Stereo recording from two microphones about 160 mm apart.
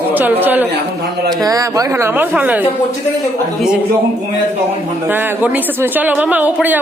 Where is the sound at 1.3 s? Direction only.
20° right (ahead or behind).